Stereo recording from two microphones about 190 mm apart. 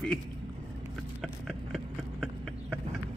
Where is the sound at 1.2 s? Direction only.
Centre (ahead or behind).